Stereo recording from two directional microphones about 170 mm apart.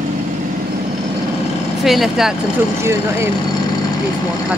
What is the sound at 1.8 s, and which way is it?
Speech, centre (ahead or behind).